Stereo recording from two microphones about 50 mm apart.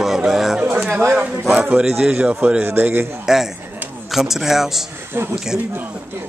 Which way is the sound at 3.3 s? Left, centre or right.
Centre.